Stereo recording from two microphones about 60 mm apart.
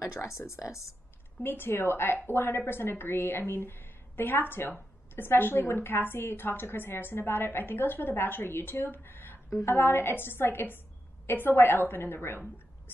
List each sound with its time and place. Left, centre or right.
0.0 s speech: left
1.4 s a woman's voice: left